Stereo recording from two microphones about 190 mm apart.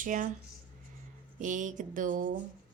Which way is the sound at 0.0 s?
45° right (ahead or behind).